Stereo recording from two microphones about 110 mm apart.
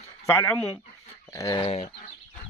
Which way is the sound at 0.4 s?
25° left (ahead or behind).